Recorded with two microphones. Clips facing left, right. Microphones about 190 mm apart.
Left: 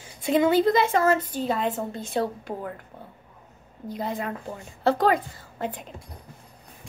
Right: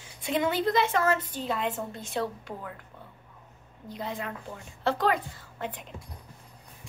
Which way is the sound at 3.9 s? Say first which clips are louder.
Left 5 dB; 40° left (ahead or behind).